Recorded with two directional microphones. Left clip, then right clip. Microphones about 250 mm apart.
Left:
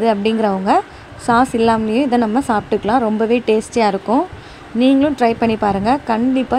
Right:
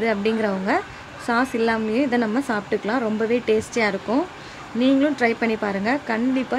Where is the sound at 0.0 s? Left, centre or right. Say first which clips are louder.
Left 6 dB; centre.